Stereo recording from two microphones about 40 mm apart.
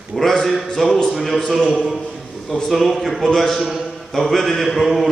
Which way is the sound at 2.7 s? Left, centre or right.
Centre.